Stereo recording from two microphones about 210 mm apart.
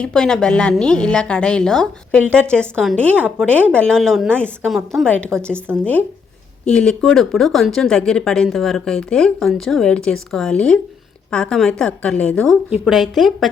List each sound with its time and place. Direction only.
0.0 s speech: 5° left (ahead or behind)
3.4 s speech: 5° left (ahead or behind)